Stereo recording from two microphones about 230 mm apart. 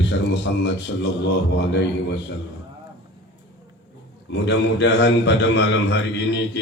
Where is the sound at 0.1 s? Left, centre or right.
Left.